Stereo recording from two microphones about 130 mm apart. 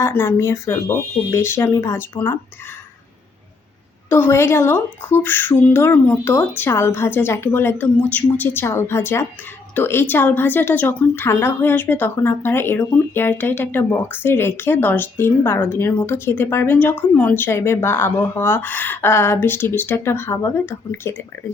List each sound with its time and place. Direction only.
0.0 s speech: 20° left (ahead or behind)
4.1 s a woman's voice: 20° left (ahead or behind)